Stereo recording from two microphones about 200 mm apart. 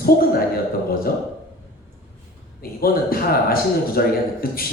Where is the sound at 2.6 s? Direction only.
50° left (ahead or behind).